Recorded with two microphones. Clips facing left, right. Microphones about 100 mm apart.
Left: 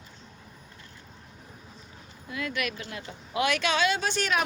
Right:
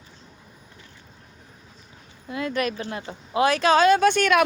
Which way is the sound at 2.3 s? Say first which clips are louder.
Right 6 dB; 35° right (ahead or behind).